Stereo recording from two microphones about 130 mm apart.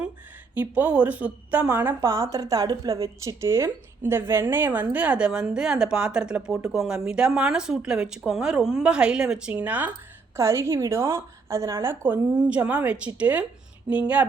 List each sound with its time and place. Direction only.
0.5 s a woman's voice: 15° right (ahead or behind)